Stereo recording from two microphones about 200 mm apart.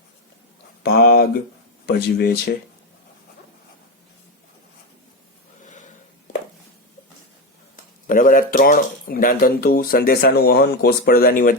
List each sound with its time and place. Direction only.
0.8 s speech: 50° left (ahead or behind)
8.0 s speech: 45° left (ahead or behind)